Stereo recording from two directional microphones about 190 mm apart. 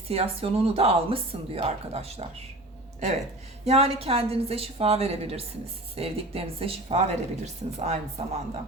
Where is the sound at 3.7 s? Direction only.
30° right (ahead or behind).